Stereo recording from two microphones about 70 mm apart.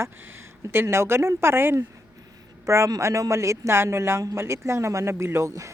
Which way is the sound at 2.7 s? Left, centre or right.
Right.